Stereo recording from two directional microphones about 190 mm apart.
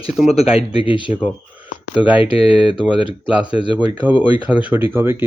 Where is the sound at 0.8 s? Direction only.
25° left (ahead or behind).